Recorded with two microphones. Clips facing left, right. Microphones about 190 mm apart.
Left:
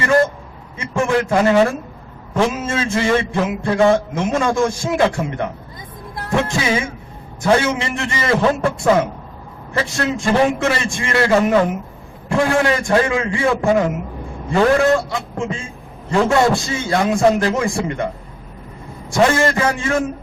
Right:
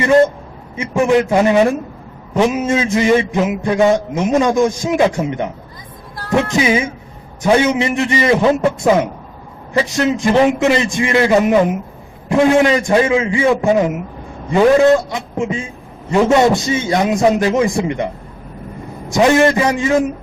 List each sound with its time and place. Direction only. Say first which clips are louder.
0.0 s vehicle: right 4 dB; 20° right (ahead or behind)
0.8 s a man's voice: right 5 dB; 20° right (ahead or behind)